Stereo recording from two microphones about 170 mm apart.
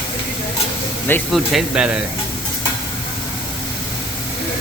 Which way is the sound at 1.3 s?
5° right (ahead or behind).